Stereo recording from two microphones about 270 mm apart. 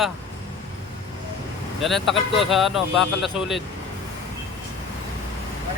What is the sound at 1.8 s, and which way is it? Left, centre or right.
Speech, centre.